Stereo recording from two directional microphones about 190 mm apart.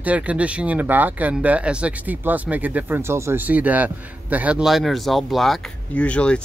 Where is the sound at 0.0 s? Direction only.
5° right (ahead or behind).